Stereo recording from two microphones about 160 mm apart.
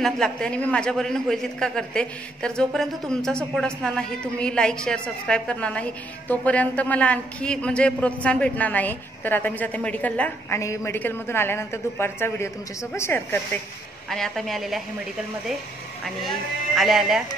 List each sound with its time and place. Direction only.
0.0 s a man's voice: 5° left (ahead or behind)
14.0 s a man's voice: centre (ahead or behind)
16.7 s a man's voice: centre (ahead or behind)